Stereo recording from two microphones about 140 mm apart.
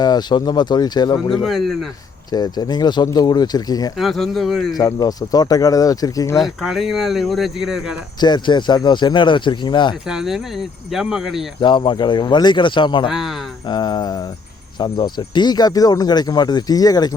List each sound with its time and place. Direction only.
0.0 s speech: 30° left (ahead or behind)
1.3 s speech: centre (ahead or behind)
2.3 s speech: 30° left (ahead or behind)
3.9 s speech: centre (ahead or behind)
4.7 s speech: 25° left (ahead or behind)
6.3 s speech: centre (ahead or behind)
8.2 s speech: 30° left (ahead or behind)
10.1 s speech: 5° right (ahead or behind)
11.6 s speech: 35° left (ahead or behind)
13.1 s speech: 5° right (ahead or behind)
13.7 s speech: 30° left (ahead or behind)